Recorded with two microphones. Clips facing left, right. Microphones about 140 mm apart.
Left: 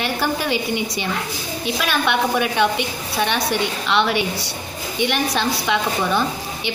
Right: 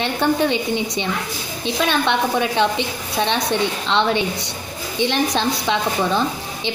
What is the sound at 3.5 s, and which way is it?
A woman's voice, 25° right (ahead or behind).